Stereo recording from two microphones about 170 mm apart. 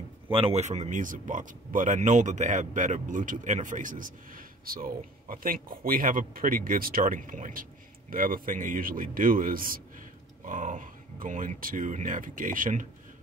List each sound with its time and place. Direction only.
0.3 s a man's voice: 35° right (ahead or behind); by 12.8 s 50° right (ahead or behind)